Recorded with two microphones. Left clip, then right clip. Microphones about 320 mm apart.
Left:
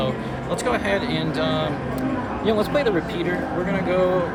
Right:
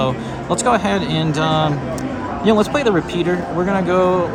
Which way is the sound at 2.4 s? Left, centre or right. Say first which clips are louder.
Right 5 dB; centre.